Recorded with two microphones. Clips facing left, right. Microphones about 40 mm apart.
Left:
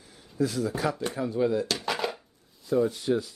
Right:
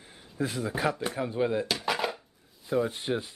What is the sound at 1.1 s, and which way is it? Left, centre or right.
Speech, right.